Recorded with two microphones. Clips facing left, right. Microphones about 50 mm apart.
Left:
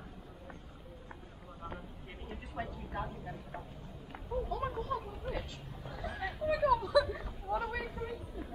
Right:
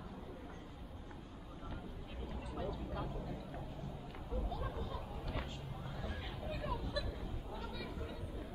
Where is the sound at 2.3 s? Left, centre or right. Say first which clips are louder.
Left 2 dB; left.